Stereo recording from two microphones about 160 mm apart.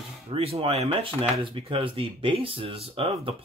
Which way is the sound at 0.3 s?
35° right (ahead or behind).